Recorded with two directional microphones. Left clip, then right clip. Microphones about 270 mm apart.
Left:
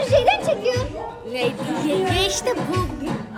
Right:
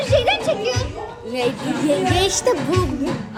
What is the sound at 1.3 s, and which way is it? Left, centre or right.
A woman's voice, centre.